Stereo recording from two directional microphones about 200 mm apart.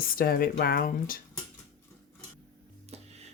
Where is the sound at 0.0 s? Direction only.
45° left (ahead or behind).